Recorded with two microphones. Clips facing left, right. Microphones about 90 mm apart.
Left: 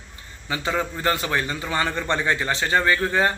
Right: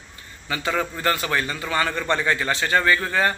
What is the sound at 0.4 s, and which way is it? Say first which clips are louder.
Speech: even; 20° left (ahead or behind).